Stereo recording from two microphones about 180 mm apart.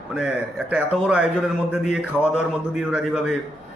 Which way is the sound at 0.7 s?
5° right (ahead or behind).